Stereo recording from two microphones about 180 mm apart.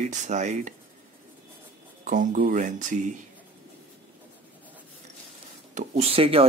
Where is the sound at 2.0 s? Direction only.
45° right (ahead or behind).